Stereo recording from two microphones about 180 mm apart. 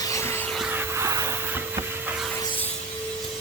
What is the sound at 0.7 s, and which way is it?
Vacuum cleaner, 15° right (ahead or behind).